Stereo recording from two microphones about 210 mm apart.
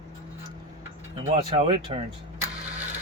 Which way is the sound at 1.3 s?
25° right (ahead or behind).